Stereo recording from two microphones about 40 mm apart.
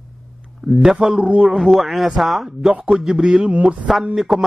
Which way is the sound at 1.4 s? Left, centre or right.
Centre.